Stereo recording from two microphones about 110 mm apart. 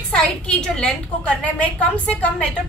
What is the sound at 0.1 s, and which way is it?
A woman's voice, 5° left (ahead or behind).